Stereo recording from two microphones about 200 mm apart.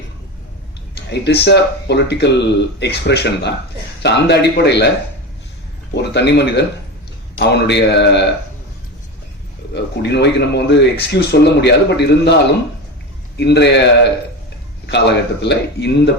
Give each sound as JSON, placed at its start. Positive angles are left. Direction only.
{"t": 1.1, "sound": "speech", "side_deg": 55}
{"t": 5.9, "sound": "speech", "side_deg": 60}
{"t": 9.7, "sound": "speech", "side_deg": 60}